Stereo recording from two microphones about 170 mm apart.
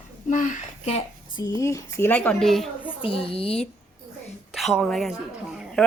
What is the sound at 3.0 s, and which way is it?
Speech, 35° left (ahead or behind).